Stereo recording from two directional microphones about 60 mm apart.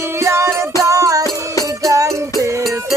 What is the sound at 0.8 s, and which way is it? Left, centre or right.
Music, right.